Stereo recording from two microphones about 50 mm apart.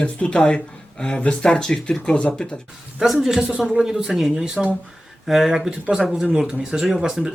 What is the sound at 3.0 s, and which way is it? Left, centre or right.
Speech, centre.